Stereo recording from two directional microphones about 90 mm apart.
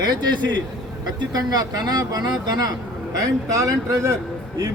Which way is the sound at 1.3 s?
45° right (ahead or behind).